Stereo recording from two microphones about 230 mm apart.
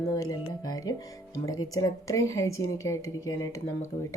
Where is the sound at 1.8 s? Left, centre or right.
Centre.